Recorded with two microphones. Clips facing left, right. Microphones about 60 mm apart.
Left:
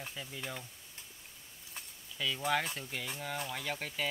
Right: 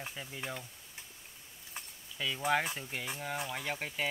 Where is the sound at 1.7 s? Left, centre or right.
Centre.